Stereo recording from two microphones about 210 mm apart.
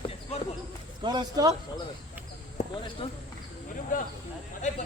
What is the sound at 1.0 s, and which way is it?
Speech, 20° right (ahead or behind).